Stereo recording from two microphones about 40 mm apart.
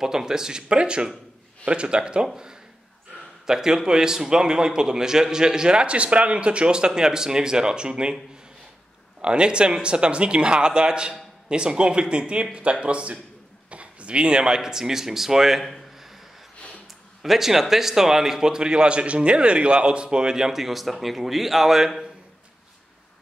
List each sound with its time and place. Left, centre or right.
0.0 s a man's voice: centre
3.4 s a man's voice: centre
9.2 s speech: right; by 15.6 s centre
15.6 s a sound: centre
17.2 s a man's voice: centre